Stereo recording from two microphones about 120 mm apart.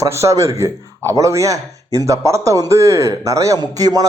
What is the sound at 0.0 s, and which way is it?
Speech, 25° right (ahead or behind).